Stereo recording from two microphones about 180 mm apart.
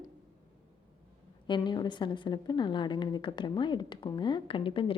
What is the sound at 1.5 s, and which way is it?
A woman's voice, 25° left (ahead or behind).